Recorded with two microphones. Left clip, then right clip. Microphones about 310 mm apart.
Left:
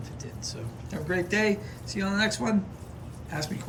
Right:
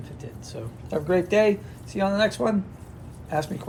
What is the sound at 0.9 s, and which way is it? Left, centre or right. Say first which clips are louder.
Speech: right 6 dB; centre.